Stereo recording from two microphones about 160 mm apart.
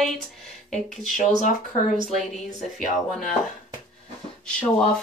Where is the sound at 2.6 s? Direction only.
55° left (ahead or behind).